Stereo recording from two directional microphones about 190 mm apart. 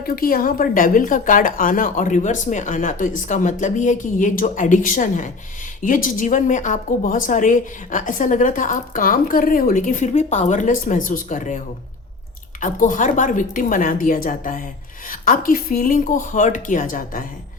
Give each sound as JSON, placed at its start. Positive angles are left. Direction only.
{"t": 0.0, "sound": "a woman's voice", "side_deg": 50}
{"t": 12.6, "sound": "a woman's voice", "side_deg": 40}